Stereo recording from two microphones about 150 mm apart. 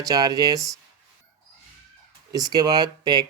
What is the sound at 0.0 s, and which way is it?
Speech, 25° right (ahead or behind).